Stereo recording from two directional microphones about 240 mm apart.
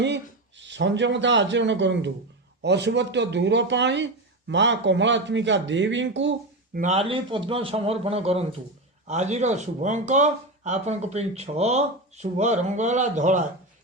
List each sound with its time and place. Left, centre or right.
0.6 s speech: right
6.7 s speech: right